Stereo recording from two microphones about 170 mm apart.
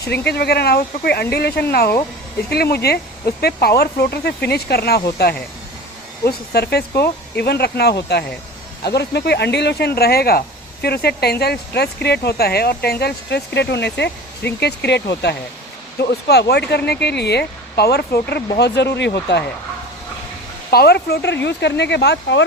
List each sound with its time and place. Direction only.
0.0 s speech: 70° left (ahead or behind)
18.8 s speech: 90° left
20.7 s speech: 70° left (ahead or behind); by 22.4 s 85° left